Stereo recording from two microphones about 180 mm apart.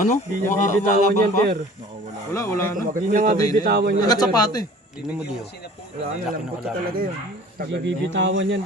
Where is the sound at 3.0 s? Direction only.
50° right (ahead or behind).